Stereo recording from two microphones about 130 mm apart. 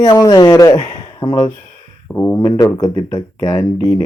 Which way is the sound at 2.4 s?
35° left (ahead or behind).